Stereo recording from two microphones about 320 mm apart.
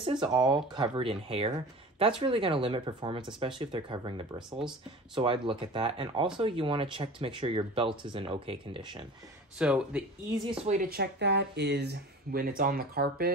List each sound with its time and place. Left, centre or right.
0.0 s speech: centre
9.6 s speech: centre
10.6 s speech: right